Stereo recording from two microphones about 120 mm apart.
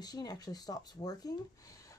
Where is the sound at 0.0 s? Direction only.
35° left (ahead or behind).